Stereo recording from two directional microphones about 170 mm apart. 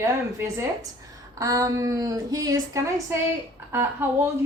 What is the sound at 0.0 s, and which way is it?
A woman's voice, 15° right (ahead or behind).